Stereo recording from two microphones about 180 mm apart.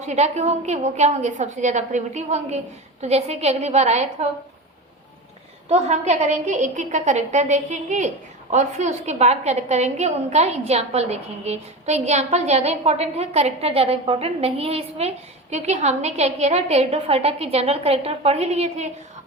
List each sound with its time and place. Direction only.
0.0 s a woman's voice: 40° right (ahead or behind)
5.6 s a woman's voice: 35° right (ahead or behind)